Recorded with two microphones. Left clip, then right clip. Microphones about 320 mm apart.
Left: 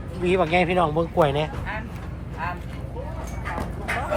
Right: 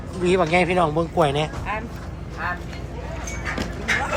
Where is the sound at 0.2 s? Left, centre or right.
Centre.